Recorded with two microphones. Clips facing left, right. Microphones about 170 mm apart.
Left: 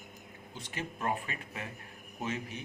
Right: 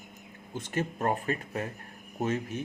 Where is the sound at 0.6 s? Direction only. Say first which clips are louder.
Right 8 dB; 45° right (ahead or behind).